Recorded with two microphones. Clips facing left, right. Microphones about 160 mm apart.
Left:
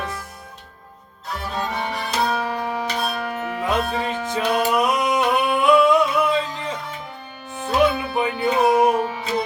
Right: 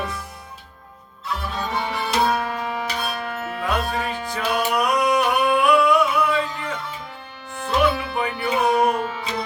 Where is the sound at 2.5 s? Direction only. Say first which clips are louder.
Left 2 dB; 15° left (ahead or behind).